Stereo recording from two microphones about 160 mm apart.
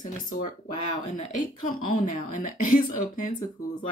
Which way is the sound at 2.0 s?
55° left (ahead or behind).